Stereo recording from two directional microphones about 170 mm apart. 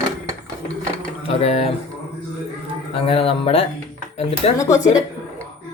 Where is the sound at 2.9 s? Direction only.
35° left (ahead or behind).